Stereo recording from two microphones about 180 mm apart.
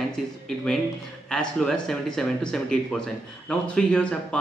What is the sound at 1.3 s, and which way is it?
Speech, 5° left (ahead or behind).